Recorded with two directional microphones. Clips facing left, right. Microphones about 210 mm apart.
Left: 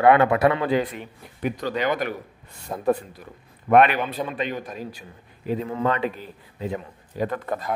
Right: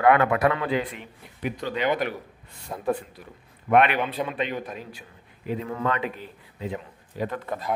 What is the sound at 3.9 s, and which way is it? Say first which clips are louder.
Speech: even; centre (ahead or behind).